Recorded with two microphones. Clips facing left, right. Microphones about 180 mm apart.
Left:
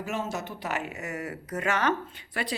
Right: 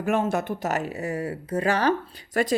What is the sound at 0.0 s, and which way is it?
Speech, 55° right (ahead or behind).